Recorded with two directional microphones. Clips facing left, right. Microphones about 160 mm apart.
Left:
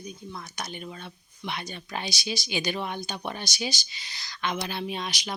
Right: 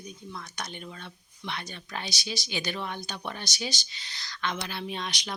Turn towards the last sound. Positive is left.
turn(degrees=5)  # may be behind; listen again after turning